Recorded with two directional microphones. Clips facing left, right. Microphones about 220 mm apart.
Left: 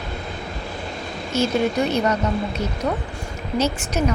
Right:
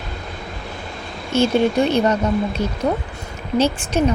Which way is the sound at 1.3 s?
30° right (ahead or behind).